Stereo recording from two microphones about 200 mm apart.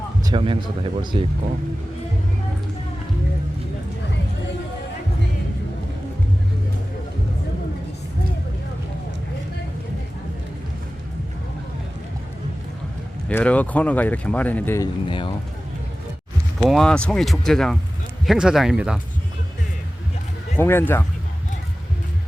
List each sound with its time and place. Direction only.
0.3 s speech: 25° right (ahead or behind)
13.2 s speech: 5° left (ahead or behind)
15.0 s speech: 25° left (ahead or behind)
16.6 s speech: centre (ahead or behind)
20.6 s speech: 10° left (ahead or behind)